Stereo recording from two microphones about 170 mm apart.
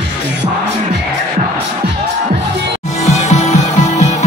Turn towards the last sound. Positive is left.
turn(degrees=40)  # may be behind; listen again after turning